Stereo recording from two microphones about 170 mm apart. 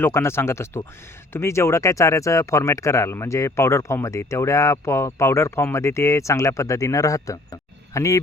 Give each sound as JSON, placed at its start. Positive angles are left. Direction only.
{"t": 0.0, "sound": "speech", "side_deg": 15}